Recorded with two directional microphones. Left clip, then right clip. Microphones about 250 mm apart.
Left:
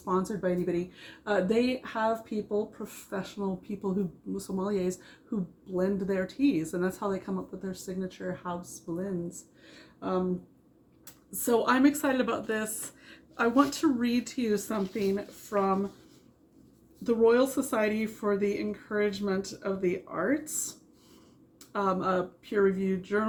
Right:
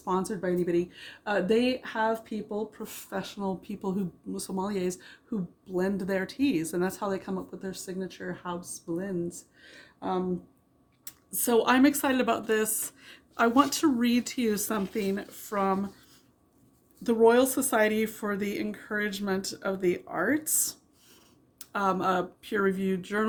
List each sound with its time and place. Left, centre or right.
0.0 s speech: right
11.0 s a woman's voice: right
17.0 s a woman's voice: right
21.7 s a woman's voice: right